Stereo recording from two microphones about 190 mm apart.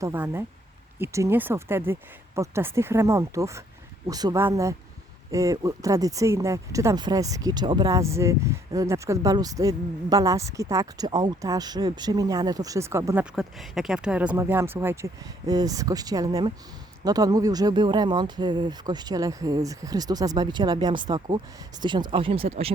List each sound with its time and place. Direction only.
0.0 s speech: 10° right (ahead or behind)
13.3 s speech: centre (ahead or behind); by 22.7 s 30° right (ahead or behind)